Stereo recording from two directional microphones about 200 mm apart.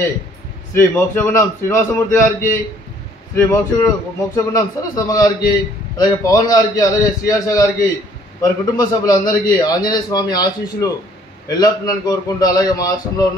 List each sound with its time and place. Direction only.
0.7 s a man's voice: 10° left (ahead or behind)